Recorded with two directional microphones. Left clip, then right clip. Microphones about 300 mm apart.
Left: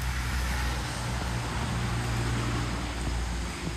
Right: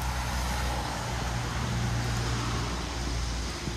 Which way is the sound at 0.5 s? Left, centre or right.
Right.